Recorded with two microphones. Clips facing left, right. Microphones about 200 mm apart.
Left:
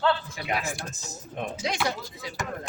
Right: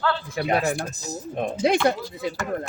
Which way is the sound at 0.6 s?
60° right (ahead or behind).